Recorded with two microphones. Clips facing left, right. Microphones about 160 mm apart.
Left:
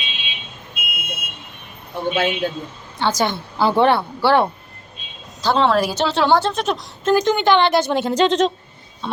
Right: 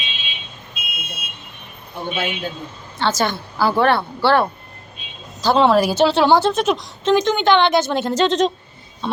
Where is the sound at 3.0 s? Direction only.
15° left (ahead or behind).